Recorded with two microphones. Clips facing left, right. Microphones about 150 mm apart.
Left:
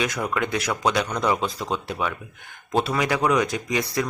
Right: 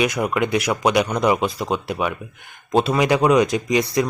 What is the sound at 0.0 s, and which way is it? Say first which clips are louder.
A man's voice: right 5 dB; 15° right (ahead or behind).